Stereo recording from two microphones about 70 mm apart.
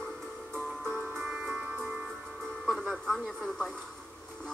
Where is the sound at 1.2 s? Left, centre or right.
Centre.